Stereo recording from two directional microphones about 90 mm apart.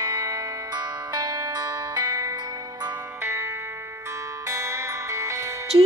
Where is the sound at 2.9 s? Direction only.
25° right (ahead or behind).